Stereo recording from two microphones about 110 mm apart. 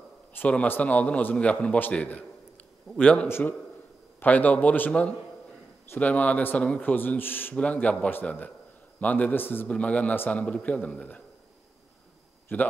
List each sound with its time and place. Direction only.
0.3 s a man's voice: 15° left (ahead or behind)
3.3 s a man's voice: 20° left (ahead or behind)
12.5 s a man's voice: 20° left (ahead or behind)